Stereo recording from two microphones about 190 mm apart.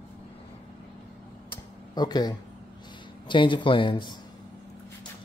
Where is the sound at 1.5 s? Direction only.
20° left (ahead or behind).